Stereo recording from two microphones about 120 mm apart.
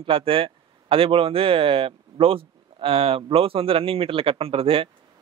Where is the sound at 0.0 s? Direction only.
50° right (ahead or behind).